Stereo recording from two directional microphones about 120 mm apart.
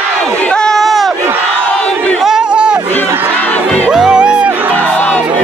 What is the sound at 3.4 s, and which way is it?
Music, 10° left (ahead or behind).